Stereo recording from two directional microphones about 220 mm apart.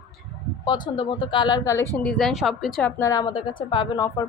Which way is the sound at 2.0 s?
Centre (ahead or behind).